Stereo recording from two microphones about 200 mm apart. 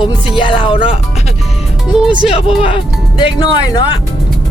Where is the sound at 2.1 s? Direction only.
25° left (ahead or behind).